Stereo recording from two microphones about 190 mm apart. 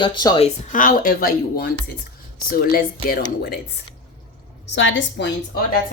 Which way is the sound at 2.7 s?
50° left (ahead or behind).